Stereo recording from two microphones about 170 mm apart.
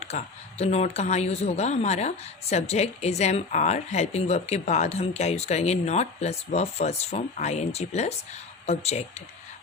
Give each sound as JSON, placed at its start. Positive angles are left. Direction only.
{"t": 0.0, "sound": "speech", "side_deg": 40}